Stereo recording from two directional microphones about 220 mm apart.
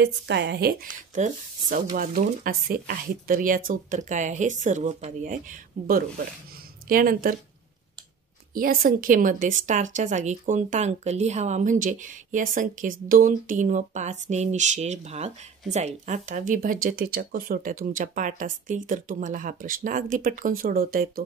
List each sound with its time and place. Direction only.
0.0 s speech: 50° right (ahead or behind)
8.5 s speech: 40° right (ahead or behind)